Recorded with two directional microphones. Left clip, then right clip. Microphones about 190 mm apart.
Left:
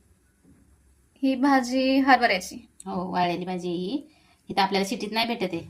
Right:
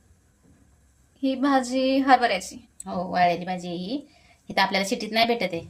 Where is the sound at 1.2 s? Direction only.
10° left (ahead or behind).